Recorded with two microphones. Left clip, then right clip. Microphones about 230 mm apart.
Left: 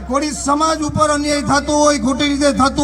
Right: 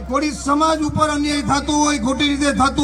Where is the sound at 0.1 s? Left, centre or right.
Left.